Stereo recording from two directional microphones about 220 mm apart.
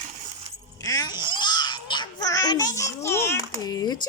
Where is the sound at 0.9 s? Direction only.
15° left (ahead or behind).